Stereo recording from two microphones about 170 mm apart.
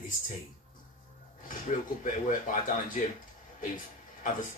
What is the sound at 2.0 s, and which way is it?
Speech, 50° left (ahead or behind).